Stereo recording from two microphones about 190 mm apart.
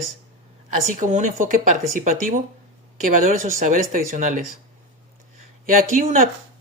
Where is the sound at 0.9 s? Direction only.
45° right (ahead or behind).